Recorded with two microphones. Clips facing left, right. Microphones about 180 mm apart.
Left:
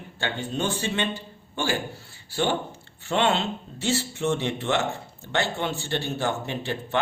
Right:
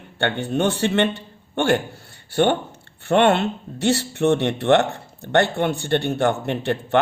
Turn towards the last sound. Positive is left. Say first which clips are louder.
# right 7 dB
turn(degrees=-60)  # may be behind; listen again after turning